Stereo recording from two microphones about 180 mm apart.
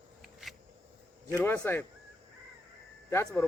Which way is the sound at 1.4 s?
10° left (ahead or behind).